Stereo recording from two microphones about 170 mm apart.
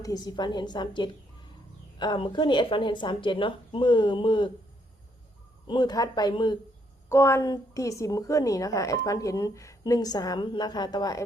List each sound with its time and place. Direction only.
0.0 s a woman's voice: 20° left (ahead or behind)
5.6 s a woman's voice: 25° left (ahead or behind)
7.1 s a woman's voice: 15° left (ahead or behind)